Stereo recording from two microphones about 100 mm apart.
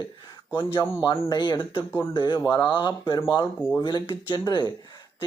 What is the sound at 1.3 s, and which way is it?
Speech, 50° left (ahead or behind).